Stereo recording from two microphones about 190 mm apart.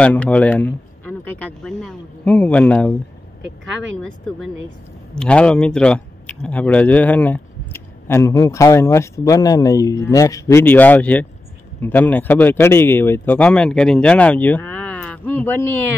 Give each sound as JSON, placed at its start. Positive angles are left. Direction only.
{"t": 0.0, "sound": "speech", "side_deg": 5}
{"t": 3.4, "sound": "speech", "side_deg": -80}
{"t": 5.1, "sound": "speech", "side_deg": 5}